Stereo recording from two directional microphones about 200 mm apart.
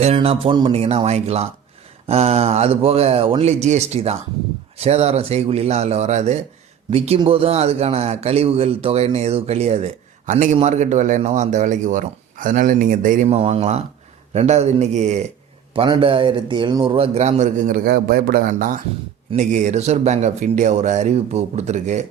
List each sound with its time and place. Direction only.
0.0 s a man's voice: 30° right (ahead or behind)